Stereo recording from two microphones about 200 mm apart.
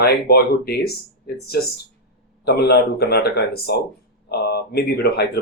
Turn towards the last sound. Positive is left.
turn(degrees=55)  # may be behind; listen again after turning